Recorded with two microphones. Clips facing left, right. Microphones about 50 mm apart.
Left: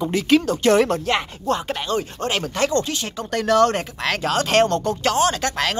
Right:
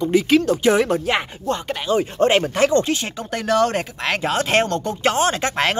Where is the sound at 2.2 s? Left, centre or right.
Right.